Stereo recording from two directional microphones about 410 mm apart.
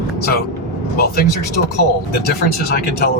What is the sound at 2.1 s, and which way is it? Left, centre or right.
Speech, left.